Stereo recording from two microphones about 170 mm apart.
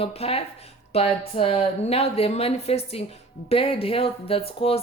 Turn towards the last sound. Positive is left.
turn(degrees=35)  # may be behind; listen again after turning